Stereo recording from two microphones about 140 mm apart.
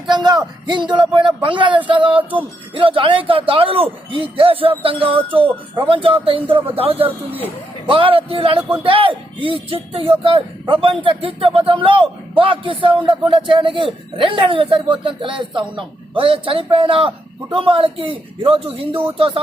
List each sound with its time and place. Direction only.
0.1 s speech: 30° right (ahead or behind)
7.0 s speech: 15° right (ahead or behind)
7.9 s speech: 40° right (ahead or behind)